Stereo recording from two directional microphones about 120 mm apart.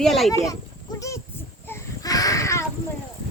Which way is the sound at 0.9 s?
25° left (ahead or behind).